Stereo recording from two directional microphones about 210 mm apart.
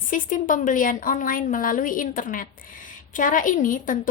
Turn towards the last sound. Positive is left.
turn(degrees=40)  # may be behind; listen again after turning